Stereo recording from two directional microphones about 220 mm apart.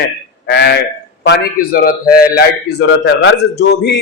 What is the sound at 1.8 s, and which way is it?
A man's voice, 45° left (ahead or behind).